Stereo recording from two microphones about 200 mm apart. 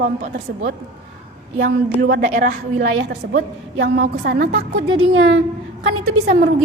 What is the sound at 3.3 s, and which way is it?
A woman's voice, 60° right (ahead or behind).